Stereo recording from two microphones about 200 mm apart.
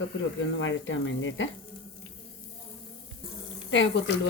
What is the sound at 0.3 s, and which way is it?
Speech, 70° left (ahead or behind).